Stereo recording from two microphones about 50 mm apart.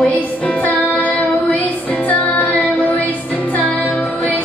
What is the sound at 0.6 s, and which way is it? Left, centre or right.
Music, left.